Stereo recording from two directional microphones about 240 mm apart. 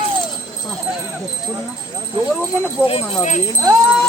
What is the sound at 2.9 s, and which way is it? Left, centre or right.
Speech, left.